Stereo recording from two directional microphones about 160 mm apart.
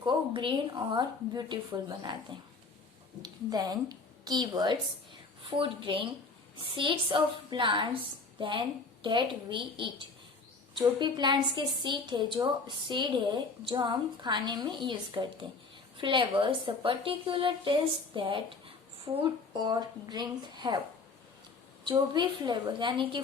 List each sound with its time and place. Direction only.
0.0 s a sound: 30° right (ahead or behind)
0.9 s a woman's voice: 25° right (ahead or behind)
3.2 s a woman's voice: 25° right (ahead or behind)
21.8 s a woman's voice: 30° right (ahead or behind)